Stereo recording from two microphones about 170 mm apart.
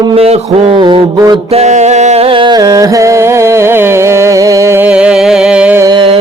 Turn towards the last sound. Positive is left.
turn(degrees=-30)  # may be behind; listen again after turning